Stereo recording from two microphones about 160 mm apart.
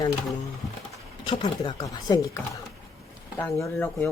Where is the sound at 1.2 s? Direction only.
30° left (ahead or behind).